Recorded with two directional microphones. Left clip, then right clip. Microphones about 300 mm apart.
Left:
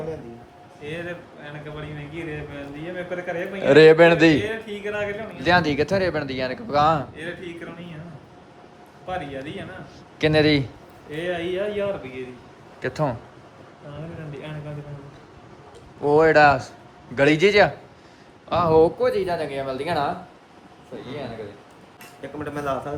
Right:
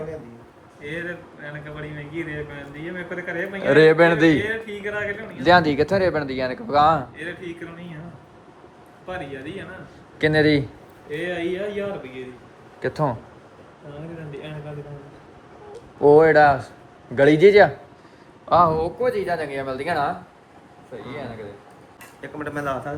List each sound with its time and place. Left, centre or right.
0.9 s speech: centre
9.0 s speech: centre
11.1 s speech: left
12.8 s speech: centre
16.0 s speech: centre
22.2 s speech: centre